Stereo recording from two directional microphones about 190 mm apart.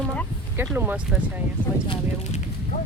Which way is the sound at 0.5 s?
10° right (ahead or behind).